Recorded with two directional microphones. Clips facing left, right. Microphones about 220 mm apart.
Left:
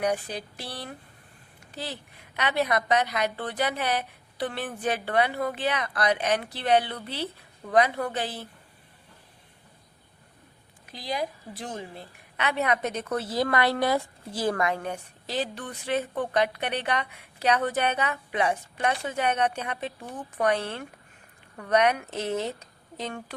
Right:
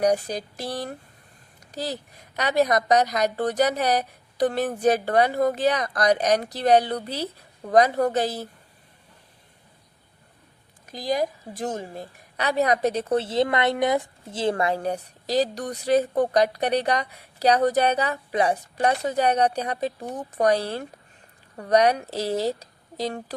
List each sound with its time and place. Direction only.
0.0 s a woman's voice: 40° right (ahead or behind)
10.8 s a woman's voice: 45° right (ahead or behind)